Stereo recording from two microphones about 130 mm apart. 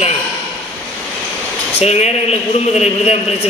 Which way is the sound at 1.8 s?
55° left (ahead or behind).